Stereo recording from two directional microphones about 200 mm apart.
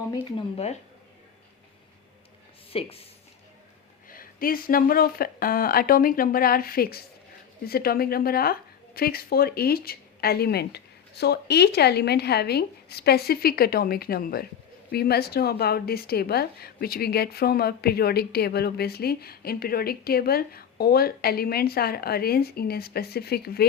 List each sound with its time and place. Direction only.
0.3 s speech: 30° left (ahead or behind)
2.7 s speech: 30° left (ahead or behind)
4.1 s speech: 45° left (ahead or behind)